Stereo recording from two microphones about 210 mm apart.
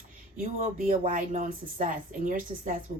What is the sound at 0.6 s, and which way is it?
A woman's voice, 40° right (ahead or behind).